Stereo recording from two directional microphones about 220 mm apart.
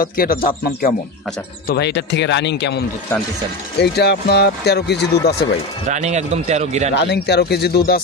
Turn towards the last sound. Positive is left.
turn(degrees=45)  # may be behind; listen again after turning